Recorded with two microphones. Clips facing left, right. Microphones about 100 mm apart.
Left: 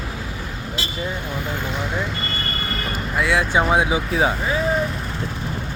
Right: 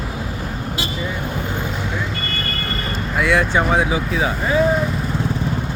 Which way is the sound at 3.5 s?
15° left (ahead or behind).